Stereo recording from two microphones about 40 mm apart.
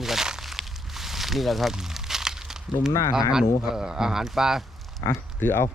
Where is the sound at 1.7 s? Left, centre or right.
Centre.